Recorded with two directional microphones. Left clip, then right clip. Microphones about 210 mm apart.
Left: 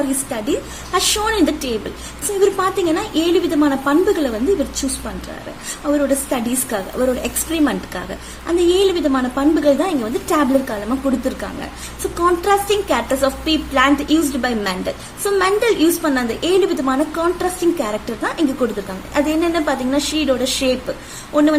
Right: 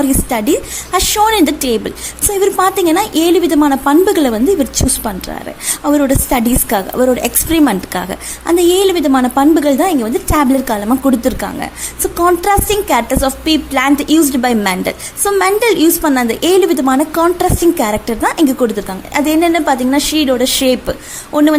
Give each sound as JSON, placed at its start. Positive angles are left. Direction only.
{"t": 0.3, "sound": "a woman's voice", "side_deg": -40}
{"t": 5.8, "sound": "a woman's voice", "side_deg": -40}